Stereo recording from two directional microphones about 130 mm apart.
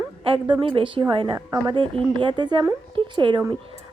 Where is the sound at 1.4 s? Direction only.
20° right (ahead or behind).